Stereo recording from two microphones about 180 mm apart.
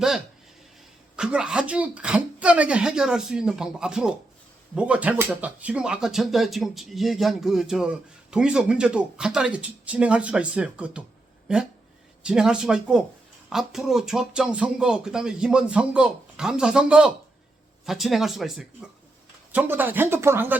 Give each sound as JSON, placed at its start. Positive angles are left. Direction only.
{"t": 1.1, "sound": "speech", "side_deg": -5}
{"t": 12.2, "sound": "speech", "side_deg": -5}